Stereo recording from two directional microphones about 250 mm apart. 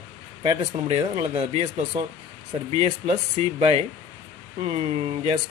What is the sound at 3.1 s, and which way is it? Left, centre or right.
Speech, right.